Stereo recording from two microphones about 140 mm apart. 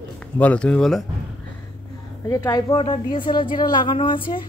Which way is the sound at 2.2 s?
25° left (ahead or behind).